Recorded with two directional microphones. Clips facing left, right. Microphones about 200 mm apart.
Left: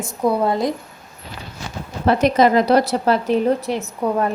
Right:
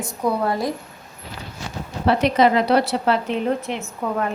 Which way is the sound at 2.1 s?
45° left (ahead or behind).